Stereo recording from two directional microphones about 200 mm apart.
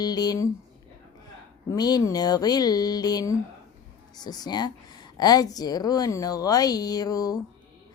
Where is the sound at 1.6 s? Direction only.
20° left (ahead or behind).